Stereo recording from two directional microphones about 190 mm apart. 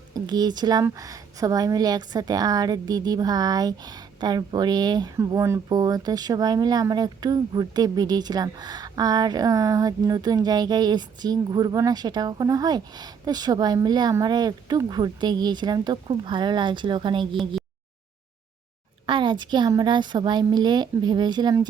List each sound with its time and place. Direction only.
0.1 s a woman's voice: 20° right (ahead or behind)
19.0 s a woman's voice: 25° right (ahead or behind)